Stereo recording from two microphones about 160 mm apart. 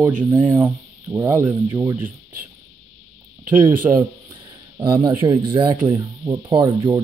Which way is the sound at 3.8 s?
25° right (ahead or behind).